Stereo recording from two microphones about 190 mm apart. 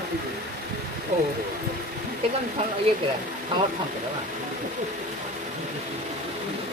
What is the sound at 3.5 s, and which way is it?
Speech, 25° right (ahead or behind).